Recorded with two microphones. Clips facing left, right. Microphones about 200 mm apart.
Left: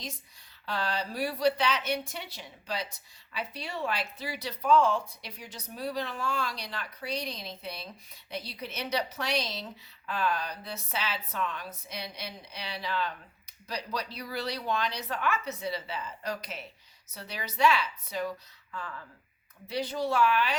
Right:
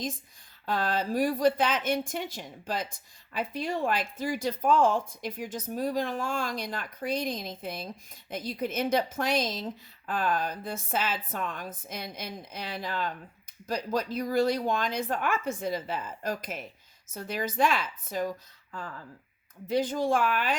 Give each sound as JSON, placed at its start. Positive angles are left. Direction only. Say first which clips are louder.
{"t": 0.6, "sound": "a woman's voice", "louder": "right 4 dB", "side_deg": -50}